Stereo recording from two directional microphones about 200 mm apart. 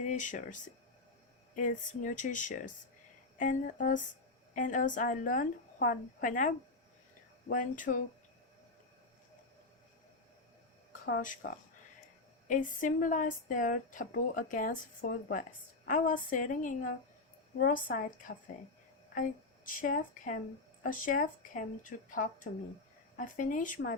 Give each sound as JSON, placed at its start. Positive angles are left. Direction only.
{"t": 0.0, "sound": "a woman's voice", "side_deg": 40}
{"t": 7.5, "sound": "a woman's voice", "side_deg": 40}
{"t": 11.0, "sound": "a woman's voice", "side_deg": 45}